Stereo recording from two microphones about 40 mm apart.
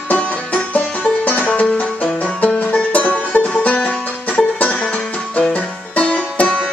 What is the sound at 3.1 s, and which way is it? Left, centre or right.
Music, left.